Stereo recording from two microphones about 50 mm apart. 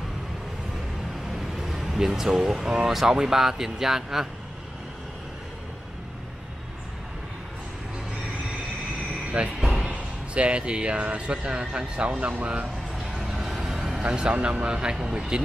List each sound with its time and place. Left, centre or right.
1.6 s speech: centre
9.6 s music: centre
9.8 s speech: right
13.4 s vehicle: centre
14.0 s speech: right